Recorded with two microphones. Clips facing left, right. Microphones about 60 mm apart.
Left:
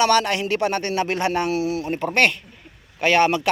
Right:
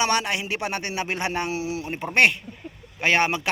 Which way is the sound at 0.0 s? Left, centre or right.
Centre.